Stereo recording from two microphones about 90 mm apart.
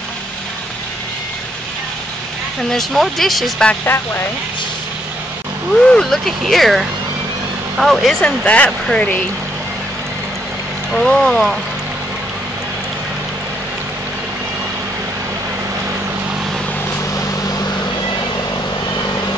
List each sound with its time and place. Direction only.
2.7 s speech: 5° left (ahead or behind)
3.8 s speech: 25° left (ahead or behind)
5.9 s speech: 5° left (ahead or behind)
8.2 s speech: 15° left (ahead or behind)
10.9 s speech: 5° left (ahead or behind)